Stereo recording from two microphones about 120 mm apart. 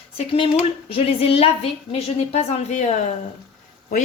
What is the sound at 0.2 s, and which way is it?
A woman's voice, 45° left (ahead or behind).